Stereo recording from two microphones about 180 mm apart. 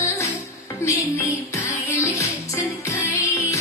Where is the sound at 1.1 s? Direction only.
15° left (ahead or behind).